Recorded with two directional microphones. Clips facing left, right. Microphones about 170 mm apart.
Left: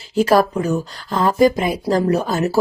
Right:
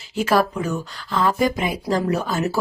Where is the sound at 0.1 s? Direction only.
35° left (ahead or behind).